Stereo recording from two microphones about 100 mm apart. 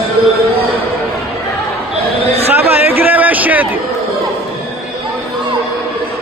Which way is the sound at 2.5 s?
20° right (ahead or behind).